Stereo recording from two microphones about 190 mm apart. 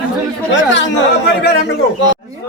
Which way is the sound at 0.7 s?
70° left (ahead or behind).